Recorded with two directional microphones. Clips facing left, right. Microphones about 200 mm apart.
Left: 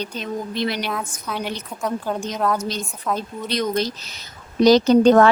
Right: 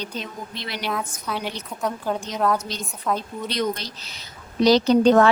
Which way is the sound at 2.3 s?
Centre (ahead or behind).